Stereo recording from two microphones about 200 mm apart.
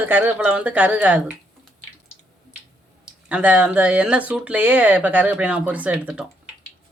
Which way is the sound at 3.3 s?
5° right (ahead or behind).